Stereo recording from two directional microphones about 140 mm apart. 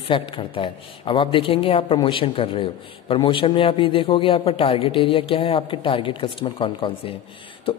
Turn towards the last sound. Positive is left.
turn(degrees=40)  # may be behind; listen again after turning